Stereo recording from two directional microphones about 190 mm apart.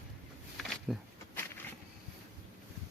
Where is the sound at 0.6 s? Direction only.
Centre (ahead or behind).